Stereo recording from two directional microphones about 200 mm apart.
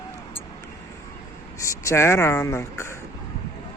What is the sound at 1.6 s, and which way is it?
Speech, 15° left (ahead or behind).